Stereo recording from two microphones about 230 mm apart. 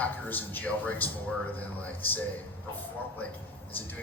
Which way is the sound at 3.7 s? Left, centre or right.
Centre.